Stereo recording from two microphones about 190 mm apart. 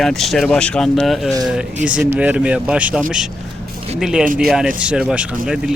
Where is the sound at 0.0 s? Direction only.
Centre (ahead or behind).